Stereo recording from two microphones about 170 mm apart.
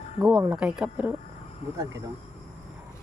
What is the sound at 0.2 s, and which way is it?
Speech, 10° right (ahead or behind).